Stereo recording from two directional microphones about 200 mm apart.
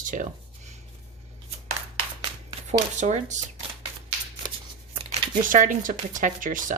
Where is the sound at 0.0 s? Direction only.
40° right (ahead or behind).